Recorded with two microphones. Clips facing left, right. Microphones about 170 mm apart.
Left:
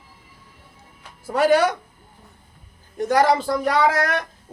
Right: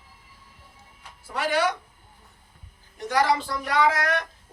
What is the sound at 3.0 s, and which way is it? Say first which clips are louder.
Speech: left 5 dB; 45° left (ahead or behind).